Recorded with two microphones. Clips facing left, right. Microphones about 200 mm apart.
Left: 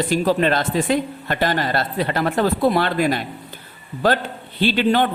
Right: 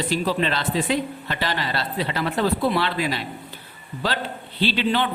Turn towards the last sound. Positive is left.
turn(degrees=50)  # may be behind; listen again after turning